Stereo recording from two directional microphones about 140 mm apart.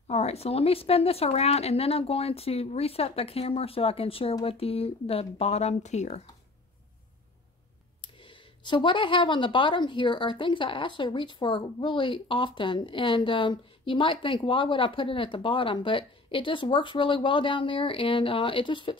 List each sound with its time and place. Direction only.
0.1 s a woman's voice: 50° left (ahead or behind)
8.0 s a woman's voice: 35° left (ahead or behind)